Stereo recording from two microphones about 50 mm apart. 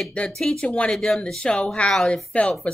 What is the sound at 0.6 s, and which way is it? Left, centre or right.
Speech, centre.